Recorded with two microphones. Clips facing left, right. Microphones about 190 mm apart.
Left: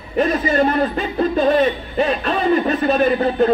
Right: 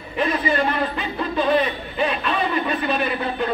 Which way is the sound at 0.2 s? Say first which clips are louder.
Left 5 dB; 40° left (ahead or behind).